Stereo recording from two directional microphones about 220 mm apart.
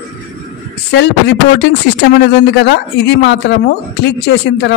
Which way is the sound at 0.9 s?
50° left (ahead or behind).